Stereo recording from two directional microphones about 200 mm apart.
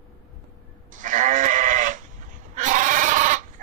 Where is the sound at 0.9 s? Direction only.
40° right (ahead or behind).